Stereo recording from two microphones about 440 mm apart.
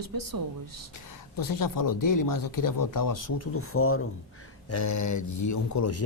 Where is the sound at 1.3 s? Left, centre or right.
Left.